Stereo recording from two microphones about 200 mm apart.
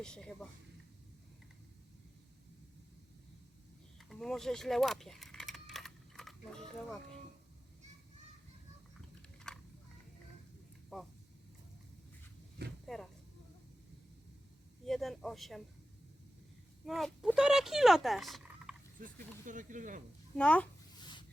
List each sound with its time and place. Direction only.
0.0 s speech: 5° left (ahead or behind)
3.9 s keys jangling: centre (ahead or behind)
9.5 s a sound: 5° left (ahead or behind)
12.8 s a sound: centre (ahead or behind)
14.8 s speech: centre (ahead or behind)
16.8 s speech: centre (ahead or behind)
18.9 s speech: 40° right (ahead or behind)
20.3 s speech: 5° left (ahead or behind)
21.0 s a sound: 20° left (ahead or behind)